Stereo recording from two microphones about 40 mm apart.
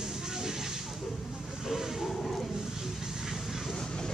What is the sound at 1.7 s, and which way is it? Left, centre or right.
Vehicle, centre.